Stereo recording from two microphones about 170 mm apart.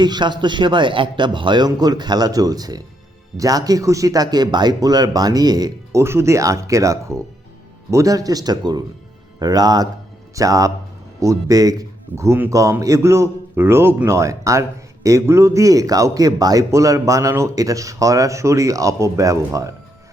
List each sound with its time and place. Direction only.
0.0 s a man's voice: 25° right (ahead or behind)